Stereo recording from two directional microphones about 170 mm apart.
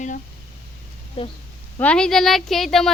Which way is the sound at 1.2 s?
35° left (ahead or behind).